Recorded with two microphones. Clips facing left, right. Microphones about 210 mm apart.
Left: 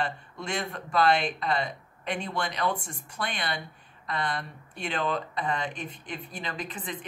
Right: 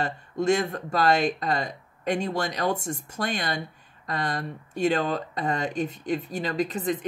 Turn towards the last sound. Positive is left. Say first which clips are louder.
# right 10 dB
turn(degrees=-40)  # may be behind; listen again after turning